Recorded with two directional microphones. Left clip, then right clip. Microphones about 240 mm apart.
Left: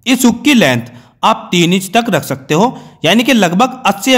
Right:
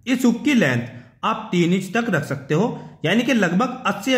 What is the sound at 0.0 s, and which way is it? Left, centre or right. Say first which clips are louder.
A man's voice: left 9 dB; left.